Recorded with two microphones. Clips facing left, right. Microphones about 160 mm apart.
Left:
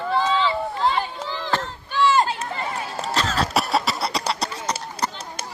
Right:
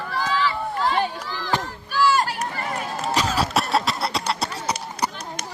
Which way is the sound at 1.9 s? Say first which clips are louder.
Left 1 dB; 25° left (ahead or behind).